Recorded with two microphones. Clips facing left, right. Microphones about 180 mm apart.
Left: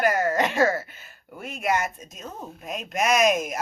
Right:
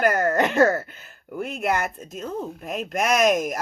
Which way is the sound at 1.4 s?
60° right (ahead or behind).